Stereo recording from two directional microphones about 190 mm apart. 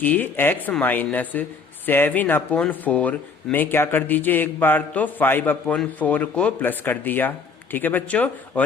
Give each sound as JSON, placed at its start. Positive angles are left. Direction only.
{"t": 0.0, "sound": "speech", "side_deg": 10}